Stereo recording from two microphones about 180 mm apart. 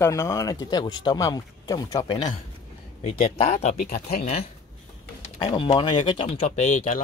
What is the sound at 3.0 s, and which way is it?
Speech, 35° left (ahead or behind).